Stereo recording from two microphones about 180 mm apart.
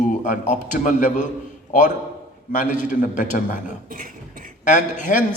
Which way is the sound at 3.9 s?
50° right (ahead or behind).